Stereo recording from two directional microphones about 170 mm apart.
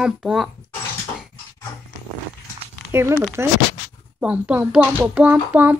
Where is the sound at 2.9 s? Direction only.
15° right (ahead or behind).